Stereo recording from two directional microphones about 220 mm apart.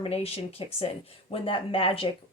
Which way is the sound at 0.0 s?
25° left (ahead or behind).